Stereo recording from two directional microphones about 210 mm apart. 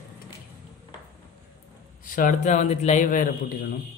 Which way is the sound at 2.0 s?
40° left (ahead or behind).